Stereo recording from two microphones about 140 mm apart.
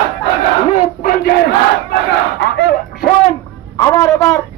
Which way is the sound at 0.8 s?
90° left.